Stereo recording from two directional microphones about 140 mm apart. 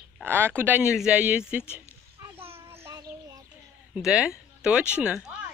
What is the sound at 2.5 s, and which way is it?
Child singing, 15° right (ahead or behind).